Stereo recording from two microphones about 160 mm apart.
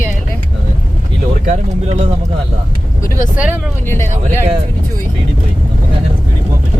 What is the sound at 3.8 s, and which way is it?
Speech, 15° left (ahead or behind).